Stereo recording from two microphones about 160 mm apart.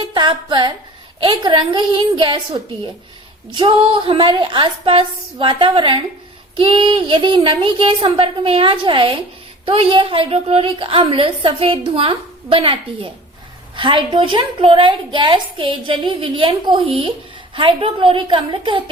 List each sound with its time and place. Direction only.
0.0 s a woman's voice: 30° right (ahead or behind)